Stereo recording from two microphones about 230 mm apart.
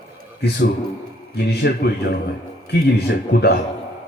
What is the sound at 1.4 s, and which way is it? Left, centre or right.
Speech, left.